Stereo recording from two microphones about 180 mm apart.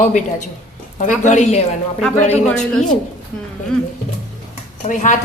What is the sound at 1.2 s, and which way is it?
Speech, 40° left (ahead or behind).